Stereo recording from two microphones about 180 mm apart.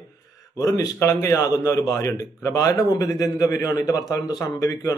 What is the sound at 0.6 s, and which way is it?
A man's voice, 20° left (ahead or behind).